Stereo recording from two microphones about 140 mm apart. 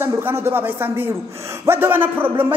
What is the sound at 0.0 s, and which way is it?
A man's voice, 15° right (ahead or behind).